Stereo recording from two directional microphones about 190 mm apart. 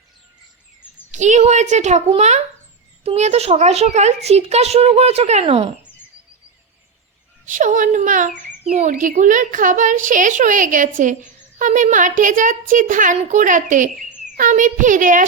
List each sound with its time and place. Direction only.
1.1 s a child's voice: 40° right (ahead or behind)
7.4 s a child's voice: 40° right (ahead or behind)